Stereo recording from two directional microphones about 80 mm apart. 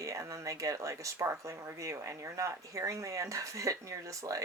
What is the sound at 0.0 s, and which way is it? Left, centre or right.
Speech, right.